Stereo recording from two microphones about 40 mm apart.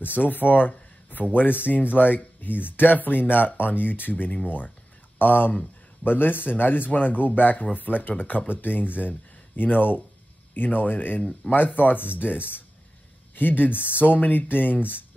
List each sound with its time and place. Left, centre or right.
0.2 s speech: left
6.0 s speech: left
13.7 s speech: right
14.1 s speech: left